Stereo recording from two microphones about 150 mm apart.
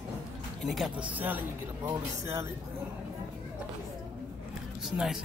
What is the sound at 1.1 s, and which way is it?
Speech, 10° right (ahead or behind).